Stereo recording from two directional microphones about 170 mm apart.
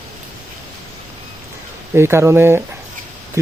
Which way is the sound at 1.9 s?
15° right (ahead or behind).